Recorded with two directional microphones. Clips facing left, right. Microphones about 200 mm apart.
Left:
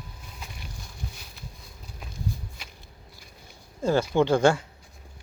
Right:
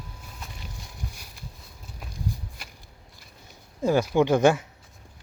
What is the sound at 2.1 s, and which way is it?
Walk, 5° right (ahead or behind).